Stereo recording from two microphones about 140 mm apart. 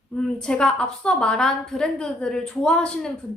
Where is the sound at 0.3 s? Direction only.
5° left (ahead or behind).